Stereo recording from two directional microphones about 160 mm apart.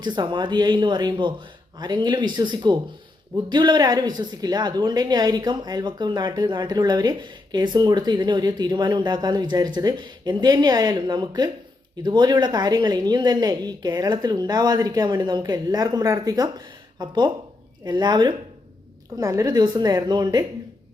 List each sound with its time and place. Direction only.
0.0 s speech: 30° right (ahead or behind)